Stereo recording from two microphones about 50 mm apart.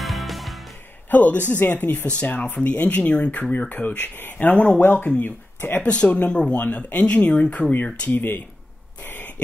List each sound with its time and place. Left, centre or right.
0.0 s music: centre
1.1 s speech: left
5.8 s speech: left
8.2 s speech: left
9.0 s a sound: left